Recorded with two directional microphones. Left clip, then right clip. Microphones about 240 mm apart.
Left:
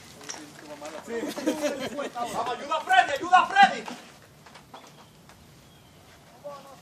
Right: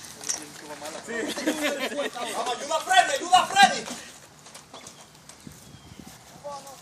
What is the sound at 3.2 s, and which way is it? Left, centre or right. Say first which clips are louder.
Speech: left 2 dB; right.